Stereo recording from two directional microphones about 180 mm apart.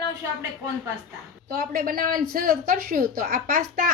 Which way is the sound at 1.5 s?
55° right (ahead or behind).